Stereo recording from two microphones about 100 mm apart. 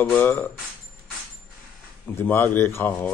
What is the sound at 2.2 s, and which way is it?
Speech, 20° left (ahead or behind).